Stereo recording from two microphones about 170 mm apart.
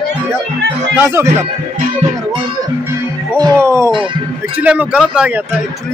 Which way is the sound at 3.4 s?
15° right (ahead or behind).